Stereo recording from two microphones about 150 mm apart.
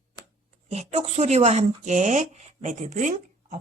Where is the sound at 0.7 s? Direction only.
45° right (ahead or behind).